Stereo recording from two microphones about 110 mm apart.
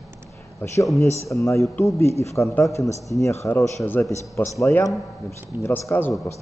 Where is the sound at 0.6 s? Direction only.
25° left (ahead or behind).